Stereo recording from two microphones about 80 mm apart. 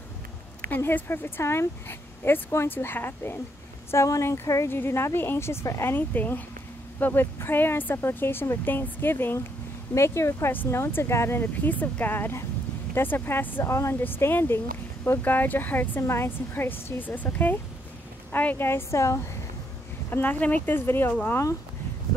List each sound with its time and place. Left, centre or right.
0.7 s a woman's voice: left
5.9 s a woman's voice: left
14.0 s speech: left
16.0 s a woman's voice: left
20.1 s speech: left